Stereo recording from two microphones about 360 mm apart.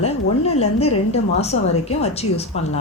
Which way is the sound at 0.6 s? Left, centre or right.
Centre.